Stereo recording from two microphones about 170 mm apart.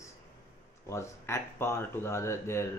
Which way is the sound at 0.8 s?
15° left (ahead or behind).